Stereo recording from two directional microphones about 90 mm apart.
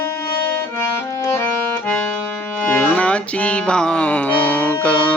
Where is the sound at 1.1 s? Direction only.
35° left (ahead or behind).